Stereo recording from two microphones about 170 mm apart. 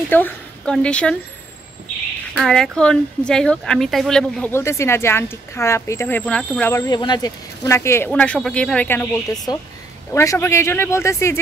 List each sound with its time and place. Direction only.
0.1 s a woman's voice: 10° left (ahead or behind)
2.3 s speech: 5° left (ahead or behind)